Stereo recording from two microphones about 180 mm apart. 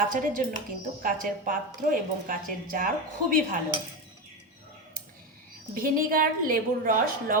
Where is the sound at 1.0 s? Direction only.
50° right (ahead or behind).